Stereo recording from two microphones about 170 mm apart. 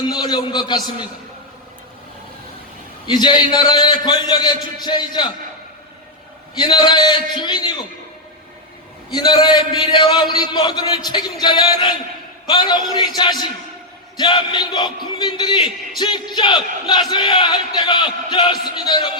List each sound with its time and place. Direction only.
0.1 s battle cry: 25° left (ahead or behind)
3.1 s battle cry: 25° left (ahead or behind)
6.6 s battle cry: 25° left (ahead or behind)
9.1 s battle cry: 25° left (ahead or behind)